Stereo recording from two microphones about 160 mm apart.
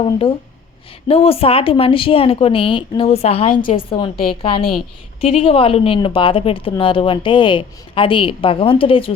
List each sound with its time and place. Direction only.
0.0 s speech: 35° left (ahead or behind)
3.5 s a woman's voice: 60° left (ahead or behind)
3.8 s speech: 30° left (ahead or behind)
5.2 s speech: 35° left (ahead or behind)